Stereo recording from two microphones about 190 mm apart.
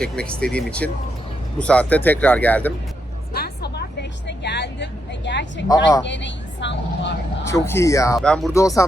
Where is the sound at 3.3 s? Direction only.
60° left (ahead or behind).